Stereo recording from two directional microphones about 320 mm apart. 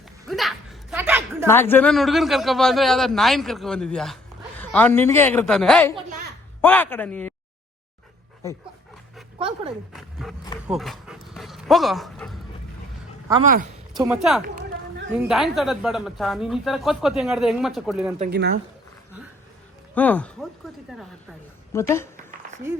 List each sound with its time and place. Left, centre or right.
0.3 s a sound: centre
1.5 s speech: centre
5.9 s a sound: centre
6.6 s speech: centre
9.9 s speech: centre
10.7 s dog: centre
13.4 s speech: right
14.0 s speech: centre
18.2 s speech: right
19.9 s speech: centre
21.7 s speech: centre